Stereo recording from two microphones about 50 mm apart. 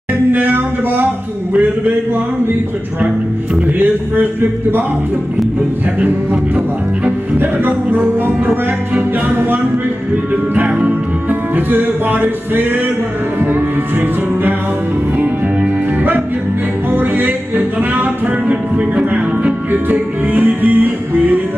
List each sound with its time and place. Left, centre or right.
0.3 s music: right
3.6 s music: right
7.1 s music: right
10.5 s music: right
11.2 s music: right
15.1 s music: right
19.0 s music: right